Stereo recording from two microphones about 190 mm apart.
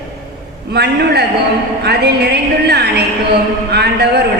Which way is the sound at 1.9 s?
60° right (ahead or behind).